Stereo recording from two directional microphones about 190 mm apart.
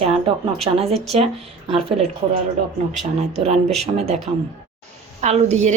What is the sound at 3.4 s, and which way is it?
Speech, 35° right (ahead or behind).